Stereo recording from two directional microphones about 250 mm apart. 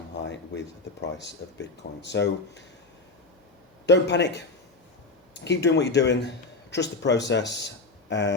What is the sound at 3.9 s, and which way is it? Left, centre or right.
Speech, left.